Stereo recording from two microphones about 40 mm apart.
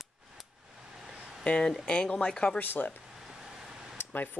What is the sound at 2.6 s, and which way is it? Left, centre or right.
Speech, left.